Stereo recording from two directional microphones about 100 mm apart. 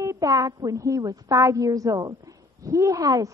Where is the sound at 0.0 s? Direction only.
35° right (ahead or behind).